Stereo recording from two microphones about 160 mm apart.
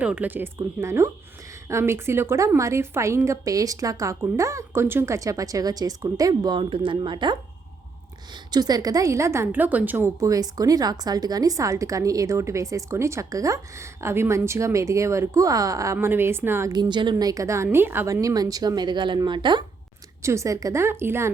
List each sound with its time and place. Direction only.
0.0 s a woman's voice: 10° right (ahead or behind); by 7.3 s 30° right (ahead or behind)
8.5 s a woman's voice: 25° right (ahead or behind)
20.2 s speech: 20° right (ahead or behind)